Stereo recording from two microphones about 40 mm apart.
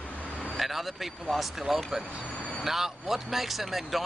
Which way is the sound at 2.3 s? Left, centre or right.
Left.